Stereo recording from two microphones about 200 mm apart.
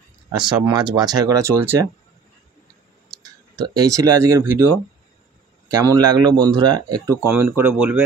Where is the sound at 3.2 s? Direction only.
20° right (ahead or behind).